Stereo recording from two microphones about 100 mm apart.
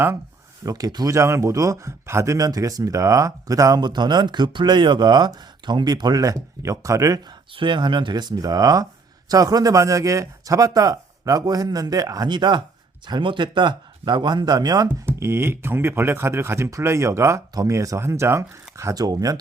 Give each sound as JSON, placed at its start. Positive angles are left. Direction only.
{"t": 0.6, "sound": "speech", "side_deg": -40}
{"t": 7.3, "sound": "speech", "side_deg": -55}
{"t": 15.0, "sound": "speech", "side_deg": -25}
{"t": 18.9, "sound": "speech", "side_deg": -40}